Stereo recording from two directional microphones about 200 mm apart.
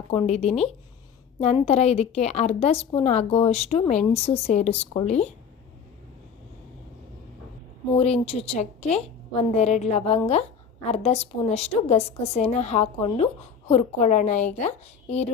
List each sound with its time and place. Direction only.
0.1 s a woman's voice: 30° left (ahead or behind)
7.9 s a woman's voice: 30° left (ahead or behind)